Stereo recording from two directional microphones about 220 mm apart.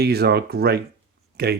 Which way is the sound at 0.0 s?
45° right (ahead or behind).